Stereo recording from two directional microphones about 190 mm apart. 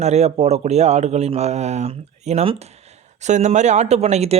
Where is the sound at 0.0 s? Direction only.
35° right (ahead or behind).